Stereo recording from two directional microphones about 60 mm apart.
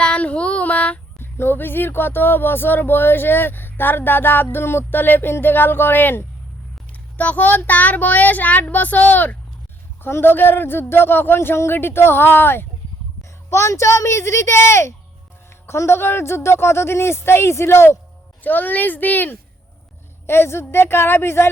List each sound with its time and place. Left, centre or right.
0.0 s female singing: left
1.2 s speech: left
7.2 s child singing: left
10.0 s speech: left
13.5 s speech: left
18.4 s child singing: left
20.2 s speech: left